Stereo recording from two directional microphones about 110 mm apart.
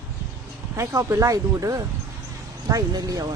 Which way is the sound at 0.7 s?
30° right (ahead or behind).